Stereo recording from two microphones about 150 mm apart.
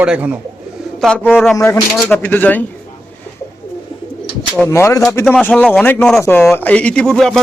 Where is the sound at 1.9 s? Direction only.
10° left (ahead or behind).